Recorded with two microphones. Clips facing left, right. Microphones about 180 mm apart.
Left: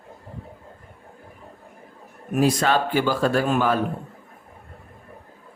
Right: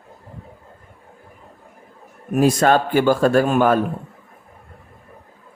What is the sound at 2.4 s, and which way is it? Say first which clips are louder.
Speech: right 4 dB; 50° right (ahead or behind).